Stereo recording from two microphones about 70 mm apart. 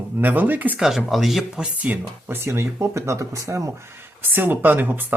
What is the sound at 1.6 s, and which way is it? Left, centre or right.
Speech, right.